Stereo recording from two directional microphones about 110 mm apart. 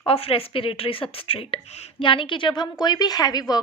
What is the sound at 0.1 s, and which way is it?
Speech, 60° left (ahead or behind).